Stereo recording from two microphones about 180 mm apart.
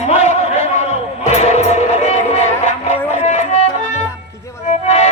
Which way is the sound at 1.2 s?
35° left (ahead or behind).